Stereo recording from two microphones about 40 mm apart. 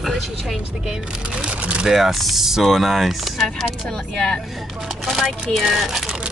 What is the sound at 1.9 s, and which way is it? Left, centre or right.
Speech, centre.